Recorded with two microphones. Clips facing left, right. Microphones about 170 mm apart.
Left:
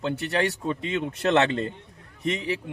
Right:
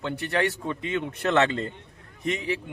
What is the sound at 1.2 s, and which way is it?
Speech, 30° left (ahead or behind).